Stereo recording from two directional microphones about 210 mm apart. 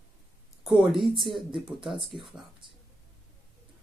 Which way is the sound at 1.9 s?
25° right (ahead or behind).